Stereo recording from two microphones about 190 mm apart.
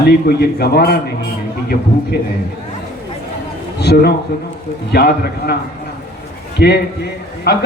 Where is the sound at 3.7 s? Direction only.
60° left (ahead or behind).